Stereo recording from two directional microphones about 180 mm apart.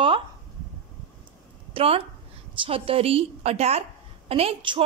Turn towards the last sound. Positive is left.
turn(degrees=-30)  # may be behind; listen again after turning